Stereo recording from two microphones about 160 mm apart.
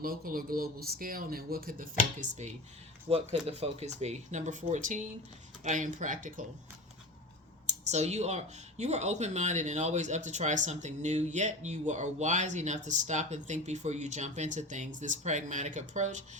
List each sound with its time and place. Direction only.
0.0 s speech: 65° right (ahead or behind)
3.1 s speech: 40° right (ahead or behind); by 6.4 s 55° right (ahead or behind)
7.7 s speech: 45° right (ahead or behind)